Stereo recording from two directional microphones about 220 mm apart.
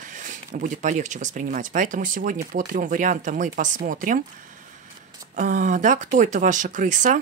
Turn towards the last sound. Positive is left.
turn(degrees=-35)  # may be behind; listen again after turning